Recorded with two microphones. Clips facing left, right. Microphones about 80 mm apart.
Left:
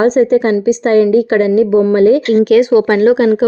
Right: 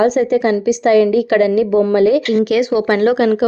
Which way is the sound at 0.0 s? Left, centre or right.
Left.